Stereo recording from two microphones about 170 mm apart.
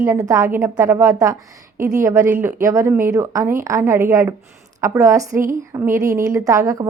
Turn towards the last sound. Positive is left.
turn(degrees=-20)  # may be behind; listen again after turning